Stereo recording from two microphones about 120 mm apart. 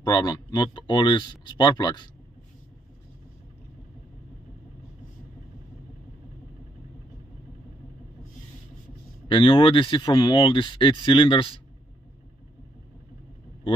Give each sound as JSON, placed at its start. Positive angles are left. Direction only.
{"t": 0.0, "sound": "speech", "side_deg": 35}
{"t": 9.3, "sound": "speech", "side_deg": 45}